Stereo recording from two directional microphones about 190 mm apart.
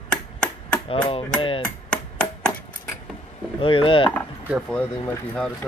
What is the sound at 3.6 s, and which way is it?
Speech, 30° left (ahead or behind).